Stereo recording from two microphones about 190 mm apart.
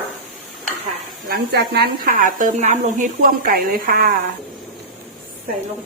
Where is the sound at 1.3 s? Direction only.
55° right (ahead or behind).